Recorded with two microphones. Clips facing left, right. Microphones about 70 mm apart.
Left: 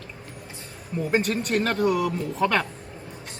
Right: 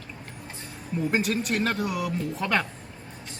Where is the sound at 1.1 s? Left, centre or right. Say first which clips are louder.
Left 4 dB; centre.